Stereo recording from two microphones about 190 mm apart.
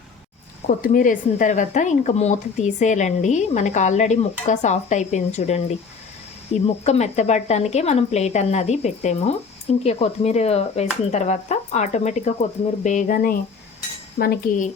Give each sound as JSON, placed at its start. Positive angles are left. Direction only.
{"t": 0.7, "sound": "speech", "side_deg": 45}
{"t": 14.2, "sound": "cutlery", "side_deg": 50}